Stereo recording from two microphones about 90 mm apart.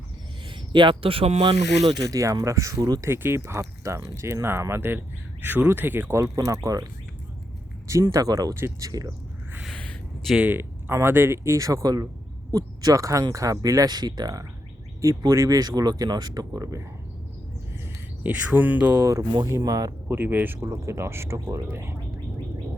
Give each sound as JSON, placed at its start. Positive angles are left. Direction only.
{"t": 0.4, "sound": "speech", "side_deg": -65}
{"t": 3.0, "sound": "speech", "side_deg": -25}
{"t": 7.9, "sound": "speech", "side_deg": -40}
{"t": 9.6, "sound": "a sound", "side_deg": 10}
{"t": 10.3, "sound": "speech", "side_deg": -20}
{"t": 16.6, "sound": "speech", "side_deg": -35}
{"t": 18.2, "sound": "speech", "side_deg": -20}
{"t": 19.5, "sound": "speech", "side_deg": -40}
{"t": 20.1, "sound": "speech", "side_deg": -25}